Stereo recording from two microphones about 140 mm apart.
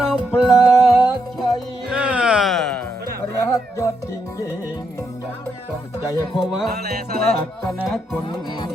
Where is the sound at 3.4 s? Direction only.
25° left (ahead or behind).